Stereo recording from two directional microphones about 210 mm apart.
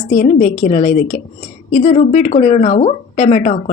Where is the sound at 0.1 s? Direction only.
40° left (ahead or behind).